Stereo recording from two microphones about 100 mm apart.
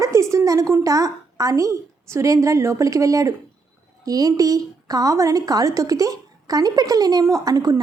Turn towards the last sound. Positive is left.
turn(degrees=-40)  # may be behind; listen again after turning